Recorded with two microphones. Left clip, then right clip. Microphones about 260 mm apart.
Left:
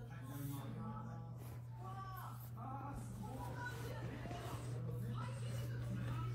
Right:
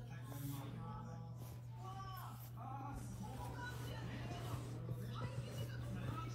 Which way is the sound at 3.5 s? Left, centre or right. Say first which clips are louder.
Left 2 dB; right.